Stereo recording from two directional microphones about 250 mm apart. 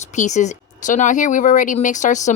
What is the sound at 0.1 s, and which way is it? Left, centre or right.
Speech, left.